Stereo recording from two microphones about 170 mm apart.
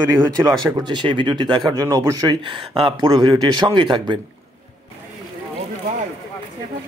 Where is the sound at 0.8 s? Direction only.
30° right (ahead or behind).